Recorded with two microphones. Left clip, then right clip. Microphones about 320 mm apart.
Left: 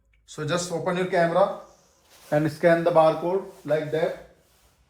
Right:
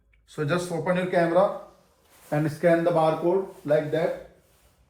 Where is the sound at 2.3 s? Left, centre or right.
Left.